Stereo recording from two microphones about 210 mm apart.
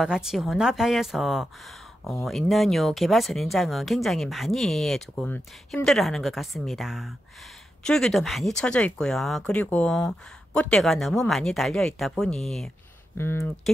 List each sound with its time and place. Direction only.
0.0 s speech: 5° right (ahead or behind)